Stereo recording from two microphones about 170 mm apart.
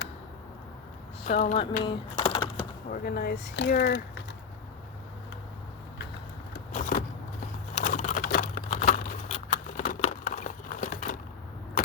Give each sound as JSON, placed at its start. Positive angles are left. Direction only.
{"t": 1.3, "sound": "speech", "side_deg": 50}
{"t": 1.8, "sound": "typing", "side_deg": 30}
{"t": 2.9, "sound": "speech", "side_deg": 60}
{"t": 3.4, "sound": "speech", "side_deg": 90}
{"t": 6.7, "sound": "vehicle", "side_deg": 50}
{"t": 7.8, "sound": "typing", "side_deg": 50}
{"t": 8.7, "sound": "a sound", "side_deg": 40}